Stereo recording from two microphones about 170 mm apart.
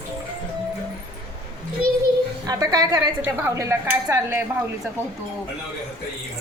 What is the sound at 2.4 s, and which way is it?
A woman's voice, 25° right (ahead or behind).